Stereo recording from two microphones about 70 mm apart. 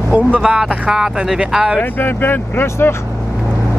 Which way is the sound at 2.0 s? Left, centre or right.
Left.